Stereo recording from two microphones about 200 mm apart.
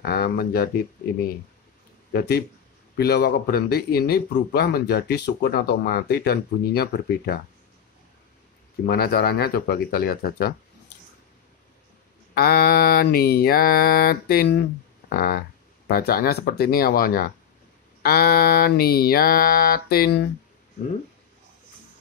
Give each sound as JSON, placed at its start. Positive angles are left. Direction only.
{"t": 0.0, "sound": "a sound", "side_deg": 50}
{"t": 2.1, "sound": "speech", "side_deg": 55}
{"t": 8.8, "sound": "speech", "side_deg": 50}
{"t": 12.4, "sound": "speech", "side_deg": 50}